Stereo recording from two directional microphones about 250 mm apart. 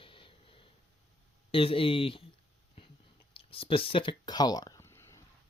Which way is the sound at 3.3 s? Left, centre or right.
Left.